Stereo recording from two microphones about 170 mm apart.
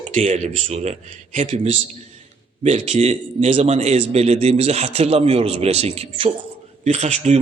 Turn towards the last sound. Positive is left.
turn(degrees=-40)  # may be behind; listen again after turning